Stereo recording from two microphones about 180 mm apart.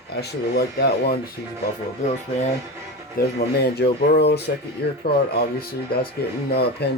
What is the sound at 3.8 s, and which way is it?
Speech, 65° left (ahead or behind).